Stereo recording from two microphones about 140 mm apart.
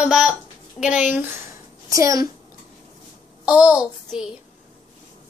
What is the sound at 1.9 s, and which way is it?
Speech, 25° right (ahead or behind).